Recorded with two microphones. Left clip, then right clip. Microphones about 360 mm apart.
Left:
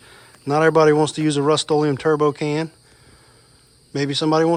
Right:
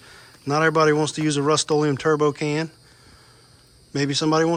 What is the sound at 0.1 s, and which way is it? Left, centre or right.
Speech, centre.